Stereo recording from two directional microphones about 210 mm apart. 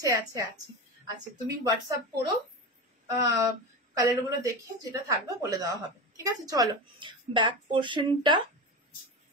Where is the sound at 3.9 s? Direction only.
15° right (ahead or behind).